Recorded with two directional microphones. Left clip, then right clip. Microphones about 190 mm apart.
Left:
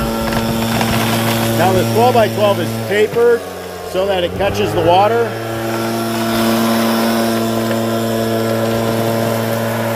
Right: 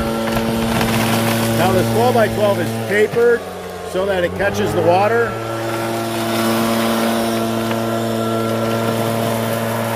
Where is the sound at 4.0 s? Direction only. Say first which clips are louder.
Left 2 dB; 10° left (ahead or behind).